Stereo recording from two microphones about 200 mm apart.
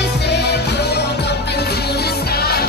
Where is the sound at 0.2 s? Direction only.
55° left (ahead or behind).